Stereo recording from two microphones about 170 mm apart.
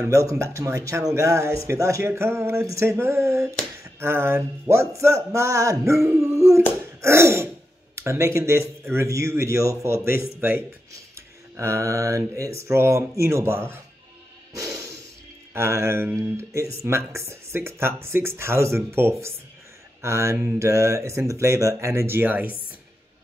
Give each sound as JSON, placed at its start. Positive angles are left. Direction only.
{"t": 0.0, "sound": "speech", "side_deg": -20}
{"t": 14.5, "sound": "music", "side_deg": -20}
{"t": 15.5, "sound": "speech", "side_deg": -15}